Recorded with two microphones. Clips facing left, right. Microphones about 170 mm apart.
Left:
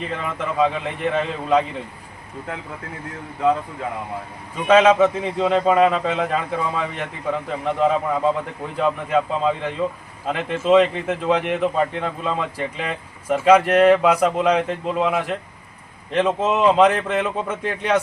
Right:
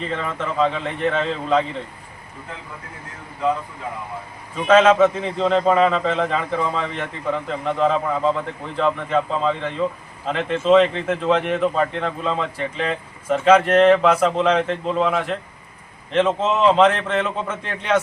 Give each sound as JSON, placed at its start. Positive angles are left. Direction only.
{"t": 0.1, "sound": "speech", "side_deg": 10}
{"t": 4.5, "sound": "speech", "side_deg": 15}